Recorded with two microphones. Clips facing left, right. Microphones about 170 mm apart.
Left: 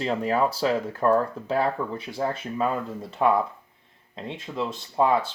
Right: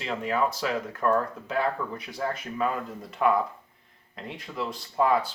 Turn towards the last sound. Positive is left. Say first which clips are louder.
# left 2 dB
turn(degrees=25)  # may be behind; listen again after turning